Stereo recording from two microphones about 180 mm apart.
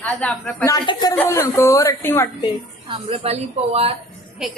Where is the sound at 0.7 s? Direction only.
25° left (ahead or behind).